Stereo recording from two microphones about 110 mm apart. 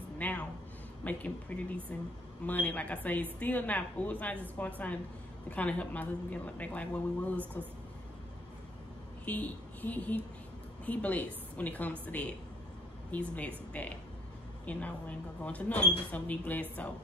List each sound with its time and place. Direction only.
0.2 s a sound: 15° left (ahead or behind)
1.0 s a woman's voice: 15° left (ahead or behind)
9.2 s a woman's voice: 15° left (ahead or behind)